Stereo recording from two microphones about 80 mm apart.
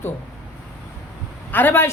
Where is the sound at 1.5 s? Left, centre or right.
Left.